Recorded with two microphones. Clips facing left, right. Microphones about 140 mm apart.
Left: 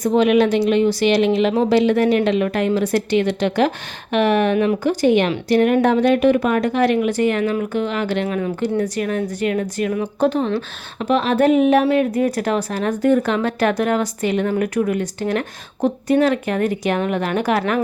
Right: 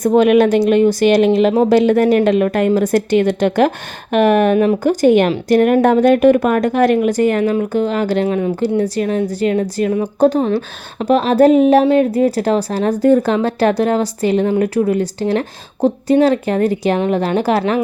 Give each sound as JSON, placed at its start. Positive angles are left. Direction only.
{"t": 0.0, "sound": "a woman's voice", "side_deg": -50}